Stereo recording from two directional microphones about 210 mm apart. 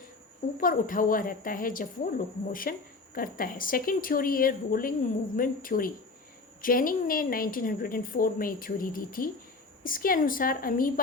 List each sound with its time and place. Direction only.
0.6 s a woman's voice: 40° left (ahead or behind)